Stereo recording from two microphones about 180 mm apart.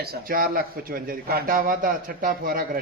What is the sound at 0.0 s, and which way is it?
A man's voice, 55° right (ahead or behind).